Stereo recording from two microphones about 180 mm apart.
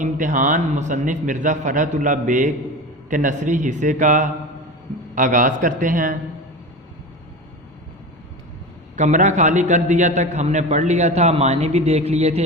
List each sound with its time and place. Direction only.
0.0 s a man's voice: 45° right (ahead or behind)
9.0 s a man's voice: 40° right (ahead or behind)